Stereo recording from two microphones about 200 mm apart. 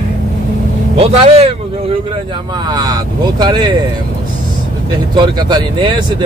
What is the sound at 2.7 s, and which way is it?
Speech, 20° right (ahead or behind).